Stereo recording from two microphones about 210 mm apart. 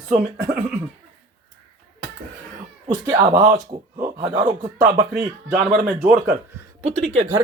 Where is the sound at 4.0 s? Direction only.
30° right (ahead or behind).